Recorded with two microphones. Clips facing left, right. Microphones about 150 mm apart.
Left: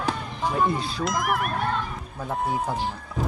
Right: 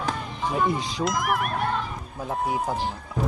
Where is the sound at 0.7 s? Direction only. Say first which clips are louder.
Even; 15° right (ahead or behind).